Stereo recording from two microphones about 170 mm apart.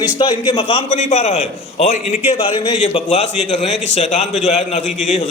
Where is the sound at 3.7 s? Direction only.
90° left.